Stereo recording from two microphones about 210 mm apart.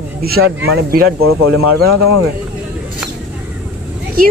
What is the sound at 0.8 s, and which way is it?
Speech, 45° right (ahead or behind).